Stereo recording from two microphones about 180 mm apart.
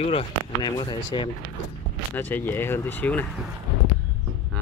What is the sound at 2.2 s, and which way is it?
Speech, 10° left (ahead or behind).